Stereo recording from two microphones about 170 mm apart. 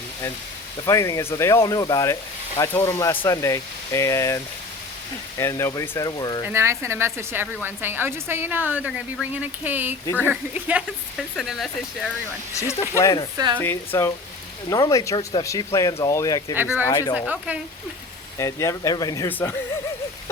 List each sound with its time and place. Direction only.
0.9 s speech: 15° left (ahead or behind)
5.4 s speech: 15° left (ahead or behind)
6.4 s a woman's voice: 15° right (ahead or behind)
13.0 s speech: 20° left (ahead or behind)
13.3 s speech: 25° right (ahead or behind)
13.6 s speech: 15° left (ahead or behind)
17.2 s a woman's voice: 5° right (ahead or behind)
18.3 s speech: 20° left (ahead or behind)